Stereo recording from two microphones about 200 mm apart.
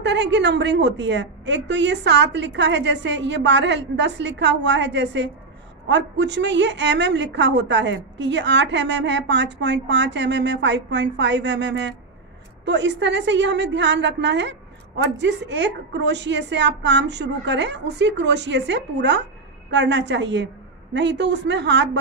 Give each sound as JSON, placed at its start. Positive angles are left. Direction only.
{"t": 0.0, "sound": "a woman's voice", "side_deg": -60}